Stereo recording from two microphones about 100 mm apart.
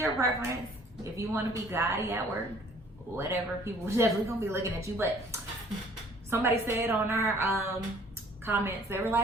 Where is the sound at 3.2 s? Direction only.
25° right (ahead or behind).